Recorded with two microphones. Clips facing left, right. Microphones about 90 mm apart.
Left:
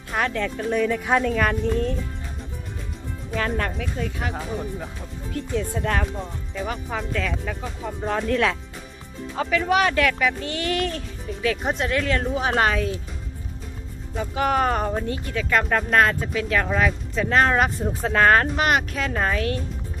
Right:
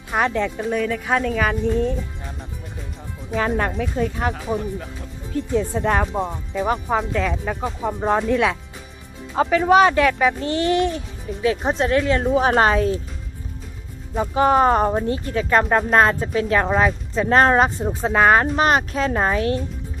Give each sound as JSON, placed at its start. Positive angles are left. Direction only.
{"t": 0.1, "sound": "speech", "side_deg": -20}
{"t": 1.6, "sound": "speech", "side_deg": -15}
{"t": 3.3, "sound": "a child's voice", "side_deg": -20}
{"t": 3.8, "sound": "a child's voice", "side_deg": -30}
{"t": 7.1, "sound": "a child's voice", "side_deg": -25}
{"t": 8.3, "sound": "speech", "side_deg": -15}
{"t": 9.3, "sound": "a child's voice", "side_deg": -35}
{"t": 12.3, "sound": "speech", "side_deg": -40}
{"t": 14.2, "sound": "speech", "side_deg": -30}
{"t": 18.5, "sound": "a child's voice", "side_deg": -30}